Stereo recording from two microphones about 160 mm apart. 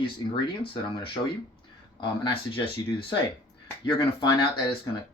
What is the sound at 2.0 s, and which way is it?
Speech, 30° left (ahead or behind).